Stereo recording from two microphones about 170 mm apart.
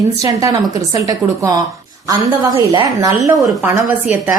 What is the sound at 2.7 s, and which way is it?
A woman's voice, 20° right (ahead or behind).